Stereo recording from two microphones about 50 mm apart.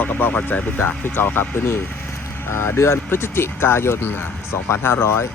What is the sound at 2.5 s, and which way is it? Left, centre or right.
Speech, left.